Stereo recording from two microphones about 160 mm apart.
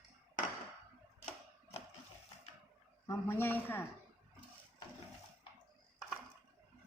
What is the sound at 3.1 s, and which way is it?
Speech, 15° left (ahead or behind).